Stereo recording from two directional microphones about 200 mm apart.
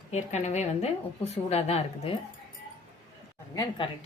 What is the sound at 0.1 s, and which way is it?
A woman's voice, 35° left (ahead or behind).